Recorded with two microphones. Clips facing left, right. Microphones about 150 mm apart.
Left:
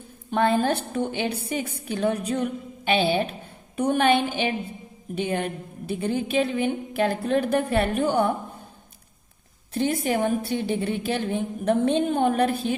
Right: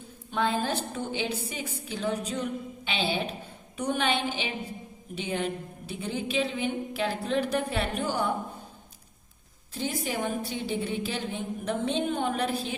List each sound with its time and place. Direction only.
0.3 s a woman's voice: 55° left (ahead or behind)
9.7 s a woman's voice: 60° left (ahead or behind)